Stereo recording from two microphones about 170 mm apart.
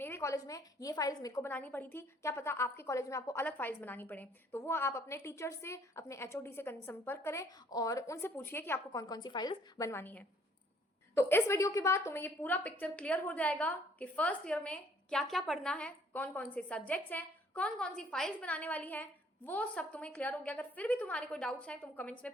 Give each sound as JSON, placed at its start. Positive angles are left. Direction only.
{"t": 0.0, "sound": "a woman's voice", "side_deg": 15}